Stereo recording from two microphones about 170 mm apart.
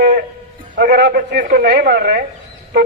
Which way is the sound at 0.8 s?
65° right (ahead or behind).